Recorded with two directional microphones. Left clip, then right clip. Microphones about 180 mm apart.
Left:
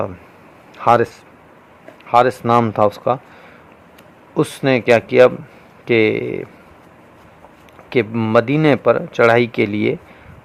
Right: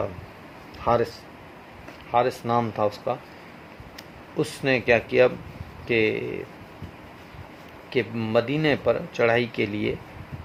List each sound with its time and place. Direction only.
0.8 s speech: 60° left (ahead or behind)
4.4 s speech: 60° left (ahead or behind)
7.9 s speech: 55° left (ahead or behind)